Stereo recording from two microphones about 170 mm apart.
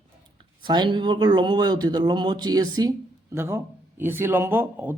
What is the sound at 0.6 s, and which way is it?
Speech, 25° right (ahead or behind).